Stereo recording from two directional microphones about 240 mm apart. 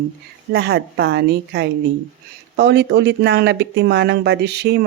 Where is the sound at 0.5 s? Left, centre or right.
Right.